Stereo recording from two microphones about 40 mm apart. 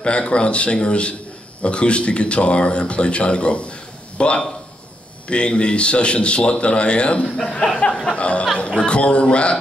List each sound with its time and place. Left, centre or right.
0.0 s speech: left
7.8 s music: left
8.2 s speech: left